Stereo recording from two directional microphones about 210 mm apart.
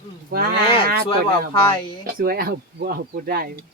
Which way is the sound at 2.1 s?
45° right (ahead or behind).